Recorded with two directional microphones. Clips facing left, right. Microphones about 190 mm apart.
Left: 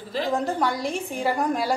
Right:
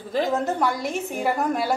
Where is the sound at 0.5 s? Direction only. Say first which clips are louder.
Right 1 dB; 5° right (ahead or behind).